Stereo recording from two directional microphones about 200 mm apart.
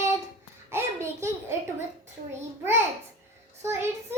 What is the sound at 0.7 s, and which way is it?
Speech, 10° right (ahead or behind).